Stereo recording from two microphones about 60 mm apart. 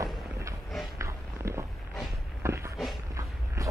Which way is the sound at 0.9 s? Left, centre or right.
Right.